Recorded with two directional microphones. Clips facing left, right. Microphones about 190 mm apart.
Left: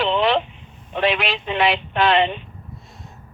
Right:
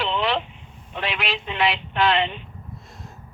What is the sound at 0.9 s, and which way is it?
Speech, 60° left (ahead or behind).